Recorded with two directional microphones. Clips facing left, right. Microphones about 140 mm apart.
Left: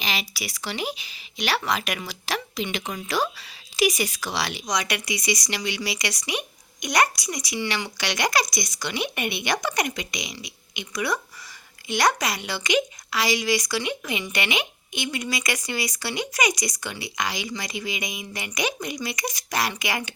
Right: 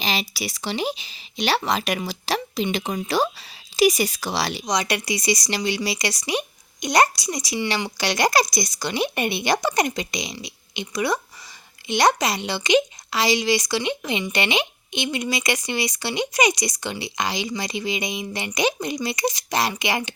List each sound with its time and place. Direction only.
0.0 s speech: 30° right (ahead or behind)